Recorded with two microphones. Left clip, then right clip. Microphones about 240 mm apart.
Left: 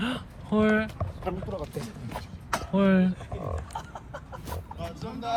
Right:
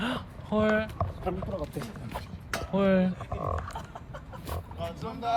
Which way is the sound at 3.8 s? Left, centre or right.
Centre.